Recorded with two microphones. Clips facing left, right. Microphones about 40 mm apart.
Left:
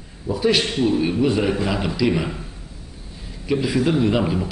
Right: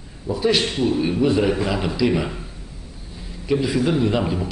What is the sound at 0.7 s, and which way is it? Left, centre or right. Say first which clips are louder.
Speech: left 1 dB; left.